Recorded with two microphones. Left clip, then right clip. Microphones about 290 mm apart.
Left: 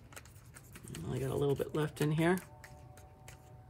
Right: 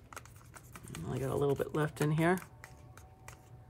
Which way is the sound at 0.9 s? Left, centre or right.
Centre.